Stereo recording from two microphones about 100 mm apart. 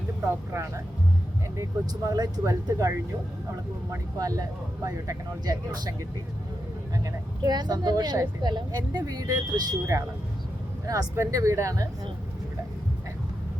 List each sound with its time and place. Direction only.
0.3 s speech: 25° right (ahead or behind)
2.0 s speech: 40° right (ahead or behind)
4.2 s speech: 35° right (ahead or behind)
7.0 s speech: 40° right (ahead or behind)